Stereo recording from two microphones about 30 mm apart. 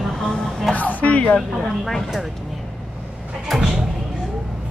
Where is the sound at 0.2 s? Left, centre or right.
Centre.